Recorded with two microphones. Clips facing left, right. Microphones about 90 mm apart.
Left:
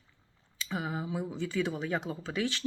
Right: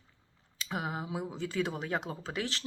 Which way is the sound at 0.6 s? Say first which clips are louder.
Left 1 dB; 55° right (ahead or behind).